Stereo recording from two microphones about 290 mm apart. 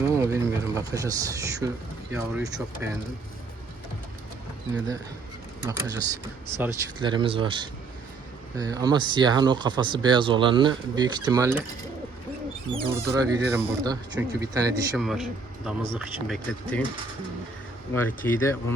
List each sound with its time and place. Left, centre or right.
0.2 s speech: centre
5.6 s speech: centre
12.7 s speech: centre
14.9 s speech: centre
18.3 s speech: centre